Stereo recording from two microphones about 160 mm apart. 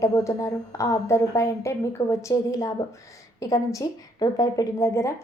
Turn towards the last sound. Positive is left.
turn(degrees=20)  # may be behind; listen again after turning